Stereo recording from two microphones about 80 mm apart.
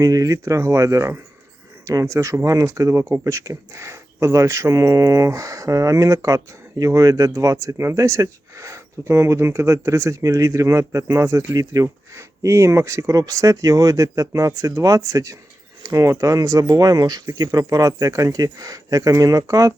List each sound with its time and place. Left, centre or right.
0.0 s speech: right